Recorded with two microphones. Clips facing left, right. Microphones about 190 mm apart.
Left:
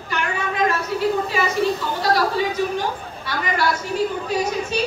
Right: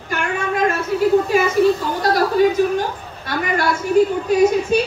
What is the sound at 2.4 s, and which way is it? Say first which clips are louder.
A man's voice: right 7 dB; 50° right (ahead or behind).